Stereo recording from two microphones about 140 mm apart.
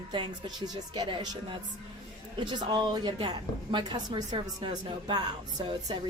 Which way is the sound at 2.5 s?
35° right (ahead or behind).